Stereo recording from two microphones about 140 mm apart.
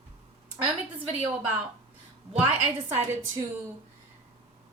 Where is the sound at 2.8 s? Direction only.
15° right (ahead or behind).